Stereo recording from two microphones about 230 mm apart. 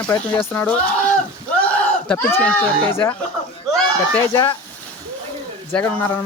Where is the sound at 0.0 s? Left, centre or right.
Centre.